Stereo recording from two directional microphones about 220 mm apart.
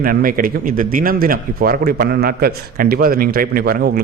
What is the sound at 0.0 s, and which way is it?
Speech, 40° right (ahead or behind).